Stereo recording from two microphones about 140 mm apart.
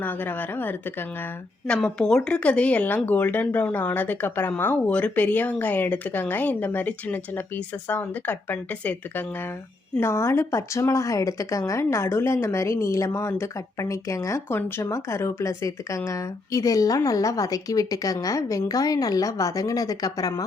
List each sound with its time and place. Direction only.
0.0 s speech: 15° left (ahead or behind)